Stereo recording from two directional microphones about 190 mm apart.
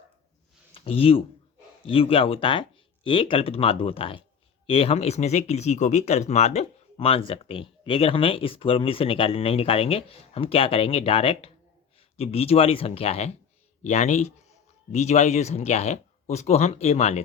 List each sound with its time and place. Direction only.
0.7 s speech: 30° left (ahead or behind)